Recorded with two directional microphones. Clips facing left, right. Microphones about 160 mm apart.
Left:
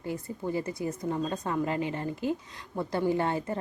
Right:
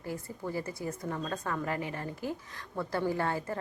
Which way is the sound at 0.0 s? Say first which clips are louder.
Left 4 dB; 20° left (ahead or behind).